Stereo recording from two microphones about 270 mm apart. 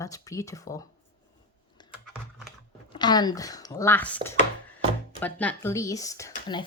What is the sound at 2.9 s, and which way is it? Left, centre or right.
Speech, centre.